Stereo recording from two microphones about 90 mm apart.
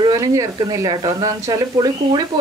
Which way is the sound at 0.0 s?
45° right (ahead or behind).